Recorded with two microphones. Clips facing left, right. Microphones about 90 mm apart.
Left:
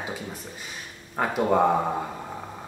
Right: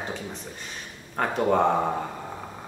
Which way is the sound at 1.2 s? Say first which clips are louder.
Even; 5° left (ahead or behind).